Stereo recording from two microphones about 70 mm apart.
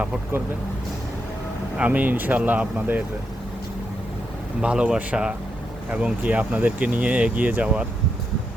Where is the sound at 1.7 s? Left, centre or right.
Right.